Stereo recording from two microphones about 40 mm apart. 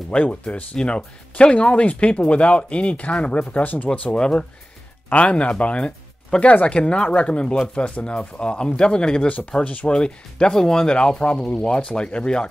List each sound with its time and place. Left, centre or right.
0.1 s speech: left
0.7 s speech: left
4.1 s speech: left
9.5 s speech: left
9.8 s speech: left